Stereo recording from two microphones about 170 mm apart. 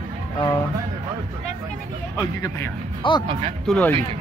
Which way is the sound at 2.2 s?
15° left (ahead or behind).